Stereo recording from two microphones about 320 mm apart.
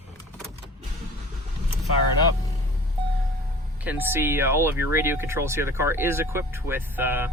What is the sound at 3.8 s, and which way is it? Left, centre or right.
Speech, centre.